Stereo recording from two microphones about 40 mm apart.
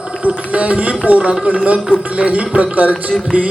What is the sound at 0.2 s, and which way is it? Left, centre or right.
A man's voice, right.